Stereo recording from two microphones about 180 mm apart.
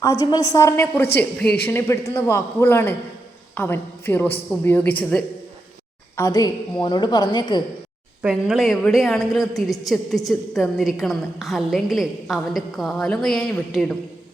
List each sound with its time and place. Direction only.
0.0 s a woman's voice: 20° left (ahead or behind)
6.1 s a woman's voice: 20° left (ahead or behind)
8.2 s a woman's voice: 5° right (ahead or behind)